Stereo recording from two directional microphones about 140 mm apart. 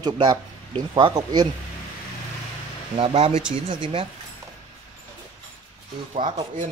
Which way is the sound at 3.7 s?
40° right (ahead or behind).